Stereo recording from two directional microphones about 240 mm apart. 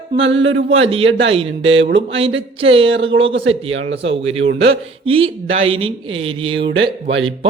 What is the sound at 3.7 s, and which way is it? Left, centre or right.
Speech, right.